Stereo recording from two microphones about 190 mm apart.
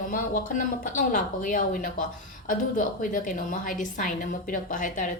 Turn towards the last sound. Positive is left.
turn(degrees=45)  # may be behind; listen again after turning